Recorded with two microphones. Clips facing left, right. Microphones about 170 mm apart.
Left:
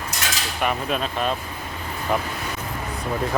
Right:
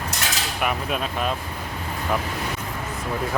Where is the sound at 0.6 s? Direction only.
5° right (ahead or behind).